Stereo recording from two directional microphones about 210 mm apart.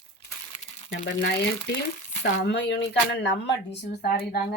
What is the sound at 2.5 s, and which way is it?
Speech, 55° left (ahead or behind).